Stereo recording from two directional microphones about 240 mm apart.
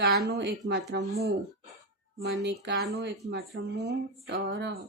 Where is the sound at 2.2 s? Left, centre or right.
Right.